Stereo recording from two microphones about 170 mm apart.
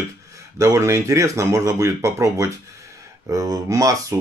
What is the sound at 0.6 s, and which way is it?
Speech, 15° right (ahead or behind).